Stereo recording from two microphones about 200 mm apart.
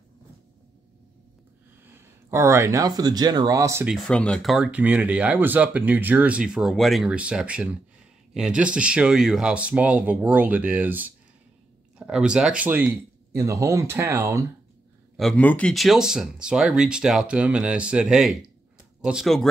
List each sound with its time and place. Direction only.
1.9 s speech: 15° right (ahead or behind)
3.9 s speech: 5° left (ahead or behind); by 14.4 s 15° right (ahead or behind)
15.1 s speech: 5° left (ahead or behind)